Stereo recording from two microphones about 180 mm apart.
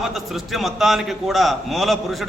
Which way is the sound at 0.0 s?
Centre (ahead or behind).